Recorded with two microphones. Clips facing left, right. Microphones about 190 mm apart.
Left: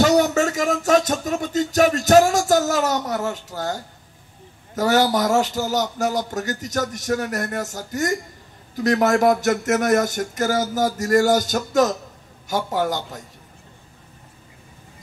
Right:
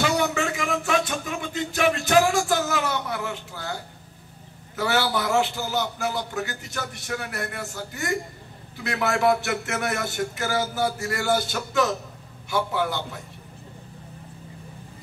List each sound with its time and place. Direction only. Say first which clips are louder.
0.0 s music: left 7 dB; 40° left (ahead or behind)
4.7 s a man's voice: left 6 dB; 40° left (ahead or behind)